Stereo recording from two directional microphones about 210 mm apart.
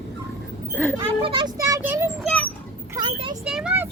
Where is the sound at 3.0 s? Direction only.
25° right (ahead or behind).